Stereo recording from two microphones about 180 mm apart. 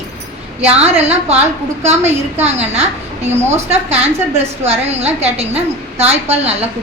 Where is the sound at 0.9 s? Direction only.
35° right (ahead or behind).